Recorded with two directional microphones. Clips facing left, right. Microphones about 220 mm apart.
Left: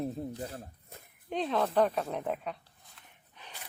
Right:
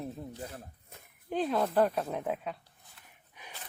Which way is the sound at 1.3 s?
5° right (ahead or behind).